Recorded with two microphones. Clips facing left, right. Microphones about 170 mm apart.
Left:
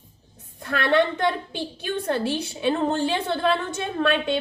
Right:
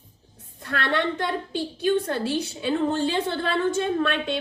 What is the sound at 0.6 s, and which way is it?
A woman's voice, 70° left (ahead or behind).